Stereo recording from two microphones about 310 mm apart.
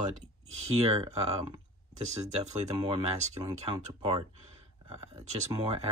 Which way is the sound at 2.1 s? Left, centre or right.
Right.